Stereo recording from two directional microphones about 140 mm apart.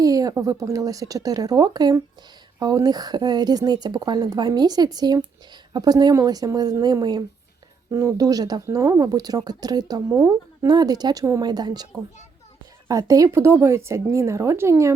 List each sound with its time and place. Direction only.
0.0 s speech: 25° right (ahead or behind)
12.9 s speech: 25° right (ahead or behind)